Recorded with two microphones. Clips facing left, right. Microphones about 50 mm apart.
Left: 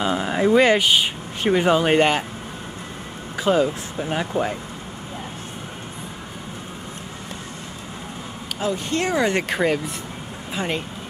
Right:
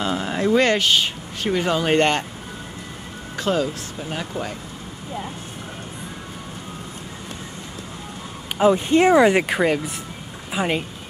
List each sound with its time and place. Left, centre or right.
0.0 s speech: centre
3.3 s speech: centre
8.5 s speech: right